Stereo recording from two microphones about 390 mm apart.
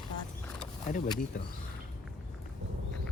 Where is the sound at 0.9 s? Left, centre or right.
Centre.